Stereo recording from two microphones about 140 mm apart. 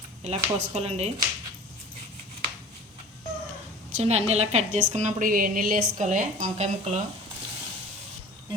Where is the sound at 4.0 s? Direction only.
50° right (ahead or behind).